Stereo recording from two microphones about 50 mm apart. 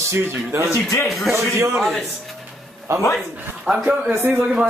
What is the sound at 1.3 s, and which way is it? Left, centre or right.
Speech, right.